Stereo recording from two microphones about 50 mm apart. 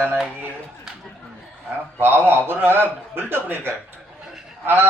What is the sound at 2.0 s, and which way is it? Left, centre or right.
A man's voice, right.